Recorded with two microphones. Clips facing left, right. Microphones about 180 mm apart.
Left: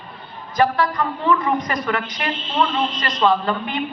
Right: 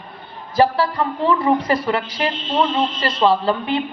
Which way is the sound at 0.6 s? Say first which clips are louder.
Right 2 dB; 30° right (ahead or behind).